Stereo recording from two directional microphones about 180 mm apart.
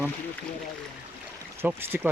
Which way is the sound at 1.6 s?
10° right (ahead or behind).